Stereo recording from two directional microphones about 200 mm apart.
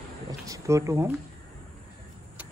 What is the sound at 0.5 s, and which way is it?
Speech, 15° right (ahead or behind).